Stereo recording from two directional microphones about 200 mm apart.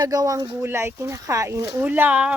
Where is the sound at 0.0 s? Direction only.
20° right (ahead or behind).